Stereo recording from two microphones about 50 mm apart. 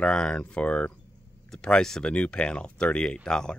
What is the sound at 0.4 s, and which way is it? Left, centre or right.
Speech, left.